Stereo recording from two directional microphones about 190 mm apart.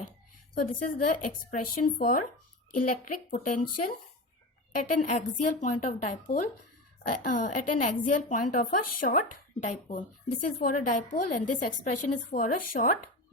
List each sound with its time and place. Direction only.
0.5 s a woman's voice: 45° left (ahead or behind)